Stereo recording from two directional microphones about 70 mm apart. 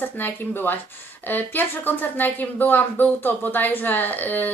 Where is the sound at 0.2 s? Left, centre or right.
Left.